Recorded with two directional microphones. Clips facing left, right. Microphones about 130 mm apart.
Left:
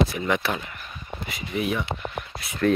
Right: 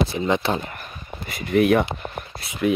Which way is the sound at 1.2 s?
55° right (ahead or behind).